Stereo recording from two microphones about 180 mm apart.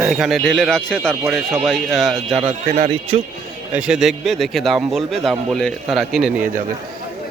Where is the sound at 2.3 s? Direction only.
30° right (ahead or behind).